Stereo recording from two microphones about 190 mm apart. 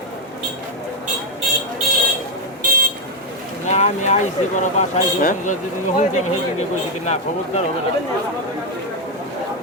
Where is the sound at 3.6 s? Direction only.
35° left (ahead or behind).